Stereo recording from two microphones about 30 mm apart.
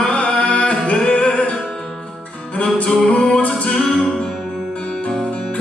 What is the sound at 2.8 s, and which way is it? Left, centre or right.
A capella, centre.